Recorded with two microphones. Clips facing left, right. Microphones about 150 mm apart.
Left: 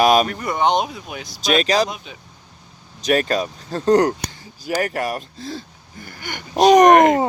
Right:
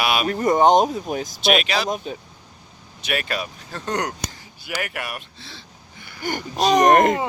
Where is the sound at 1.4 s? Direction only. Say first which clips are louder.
Left 4 dB; 40° left (ahead or behind).